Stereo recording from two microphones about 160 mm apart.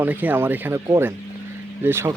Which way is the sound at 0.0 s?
10° right (ahead or behind).